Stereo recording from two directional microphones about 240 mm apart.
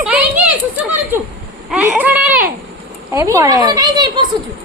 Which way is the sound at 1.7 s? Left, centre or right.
Centre.